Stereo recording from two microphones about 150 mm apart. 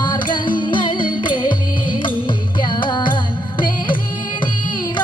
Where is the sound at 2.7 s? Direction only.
30° left (ahead or behind).